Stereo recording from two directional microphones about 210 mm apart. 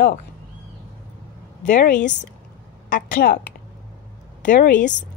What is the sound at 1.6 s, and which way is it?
Speech, 35° left (ahead or behind).